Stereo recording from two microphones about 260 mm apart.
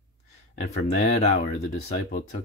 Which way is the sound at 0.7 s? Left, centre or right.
Left.